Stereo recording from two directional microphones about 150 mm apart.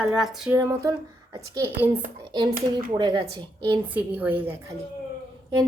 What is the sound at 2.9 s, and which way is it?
Speech, 30° right (ahead or behind).